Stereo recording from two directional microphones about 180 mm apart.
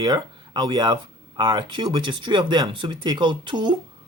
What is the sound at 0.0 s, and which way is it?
Speech, 25° right (ahead or behind).